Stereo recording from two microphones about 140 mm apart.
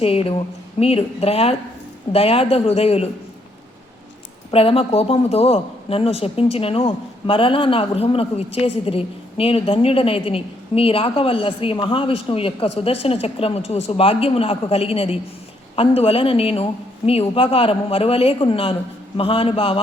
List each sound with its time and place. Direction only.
0.0 s speech: 45° left (ahead or behind)
4.5 s speech: 45° left (ahead or behind)